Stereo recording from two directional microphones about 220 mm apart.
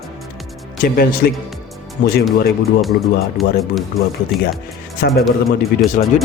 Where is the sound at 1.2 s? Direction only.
45° left (ahead or behind).